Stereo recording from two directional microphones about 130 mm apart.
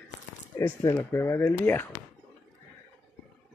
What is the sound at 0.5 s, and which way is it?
Speech, 20° left (ahead or behind).